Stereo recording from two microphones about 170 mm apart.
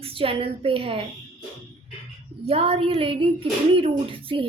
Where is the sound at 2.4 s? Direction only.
35° right (ahead or behind).